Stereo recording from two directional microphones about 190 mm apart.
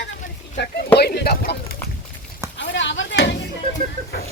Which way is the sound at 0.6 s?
60° left (ahead or behind).